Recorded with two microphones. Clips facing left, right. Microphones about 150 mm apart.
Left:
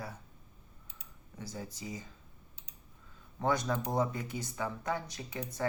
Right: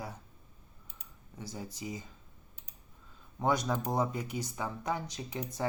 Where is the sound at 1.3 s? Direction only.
15° right (ahead or behind).